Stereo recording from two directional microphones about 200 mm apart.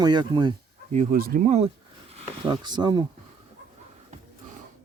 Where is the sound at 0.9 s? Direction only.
40° right (ahead or behind).